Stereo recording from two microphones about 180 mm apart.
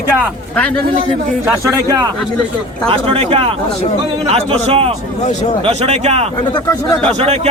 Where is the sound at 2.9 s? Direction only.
30° right (ahead or behind).